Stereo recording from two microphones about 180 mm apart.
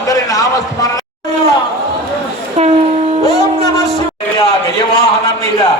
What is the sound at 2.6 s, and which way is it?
Train, 40° right (ahead or behind).